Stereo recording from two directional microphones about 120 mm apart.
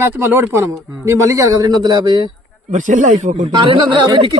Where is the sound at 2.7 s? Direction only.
90° right.